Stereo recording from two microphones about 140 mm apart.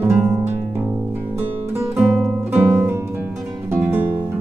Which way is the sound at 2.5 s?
10° right (ahead or behind).